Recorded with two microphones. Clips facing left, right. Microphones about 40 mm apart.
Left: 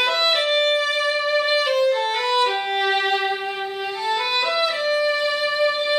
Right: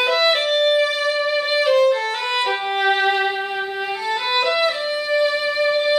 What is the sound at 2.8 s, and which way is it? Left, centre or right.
Violin, centre.